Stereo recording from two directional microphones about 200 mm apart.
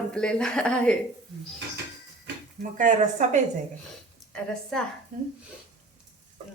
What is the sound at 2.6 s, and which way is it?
Speech, 40° right (ahead or behind).